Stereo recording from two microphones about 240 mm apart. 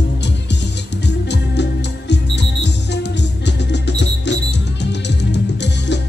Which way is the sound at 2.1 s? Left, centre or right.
Left.